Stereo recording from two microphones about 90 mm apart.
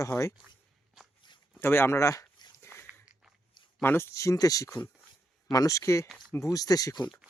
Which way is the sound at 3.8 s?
25° left (ahead or behind).